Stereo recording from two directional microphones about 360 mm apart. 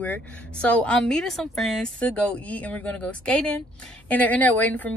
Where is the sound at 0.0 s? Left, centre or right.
Centre.